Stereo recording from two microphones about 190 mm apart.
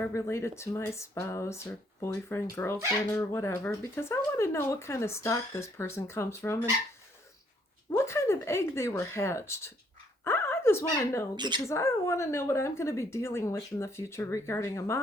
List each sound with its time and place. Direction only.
0.0 s speech: 15° left (ahead or behind)
7.9 s speech: 15° left (ahead or behind)
11.3 s speech: 25° right (ahead or behind)
11.6 s speech: 15° left (ahead or behind)